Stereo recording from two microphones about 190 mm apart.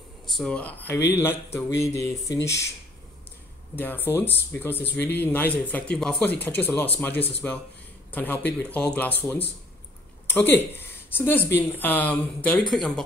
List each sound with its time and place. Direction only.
0.4 s speech: 5° left (ahead or behind)
3.7 s a man's voice: 10° left (ahead or behind)